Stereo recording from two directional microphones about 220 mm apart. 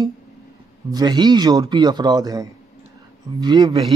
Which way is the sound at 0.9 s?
20° right (ahead or behind).